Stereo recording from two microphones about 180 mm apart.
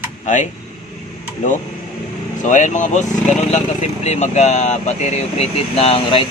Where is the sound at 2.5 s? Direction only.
45° left (ahead or behind).